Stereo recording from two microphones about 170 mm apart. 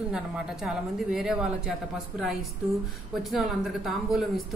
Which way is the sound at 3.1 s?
Centre (ahead or behind).